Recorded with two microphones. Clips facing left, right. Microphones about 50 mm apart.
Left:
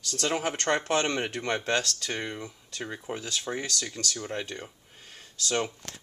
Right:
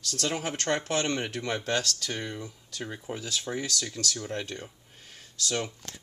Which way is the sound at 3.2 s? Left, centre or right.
Centre.